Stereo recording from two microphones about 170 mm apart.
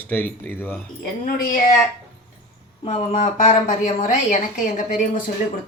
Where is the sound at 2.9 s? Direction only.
45° left (ahead or behind).